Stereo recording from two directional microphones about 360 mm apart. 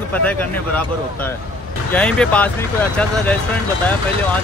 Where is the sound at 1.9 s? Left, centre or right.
Centre.